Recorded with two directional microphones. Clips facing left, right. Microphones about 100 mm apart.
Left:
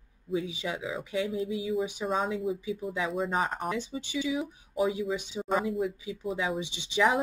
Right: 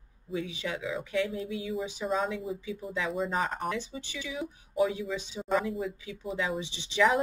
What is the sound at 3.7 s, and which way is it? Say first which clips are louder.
Speech: left 4 dB; 20° left (ahead or behind).